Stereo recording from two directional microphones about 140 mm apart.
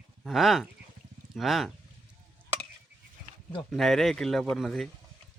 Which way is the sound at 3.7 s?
Centre (ahead or behind).